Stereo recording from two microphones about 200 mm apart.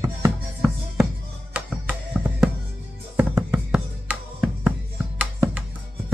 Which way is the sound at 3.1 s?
15° right (ahead or behind).